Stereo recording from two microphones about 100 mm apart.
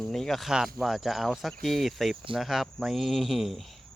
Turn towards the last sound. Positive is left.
turn(degrees=0)  # may be behind; listen again after turning